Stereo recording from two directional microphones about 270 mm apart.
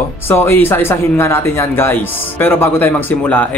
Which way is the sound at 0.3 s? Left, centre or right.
Centre.